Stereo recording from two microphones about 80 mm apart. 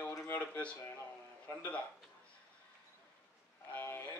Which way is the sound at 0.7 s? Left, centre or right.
Left.